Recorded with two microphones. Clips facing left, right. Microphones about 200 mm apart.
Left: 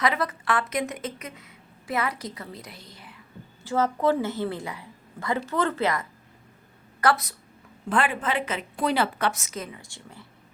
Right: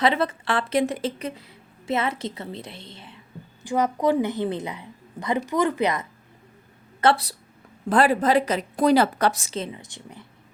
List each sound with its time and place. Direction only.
0.0 s a woman's voice: 30° right (ahead or behind)
3.6 s a woman's voice: 15° right (ahead or behind)
7.0 s a woman's voice: 30° right (ahead or behind)